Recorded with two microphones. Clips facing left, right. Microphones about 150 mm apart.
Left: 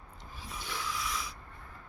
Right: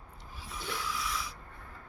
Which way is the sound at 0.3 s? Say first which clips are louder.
Right 2 dB; 5° right (ahead or behind).